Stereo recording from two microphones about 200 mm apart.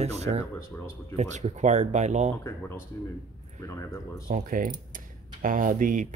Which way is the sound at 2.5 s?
10° left (ahead or behind).